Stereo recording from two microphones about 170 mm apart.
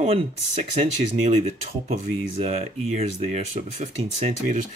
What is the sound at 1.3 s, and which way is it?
Speech, 40° right (ahead or behind).